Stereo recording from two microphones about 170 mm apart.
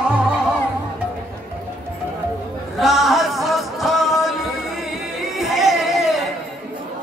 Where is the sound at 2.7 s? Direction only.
Centre (ahead or behind).